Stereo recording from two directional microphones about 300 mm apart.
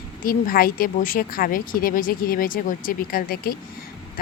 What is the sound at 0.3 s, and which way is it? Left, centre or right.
Speech, left.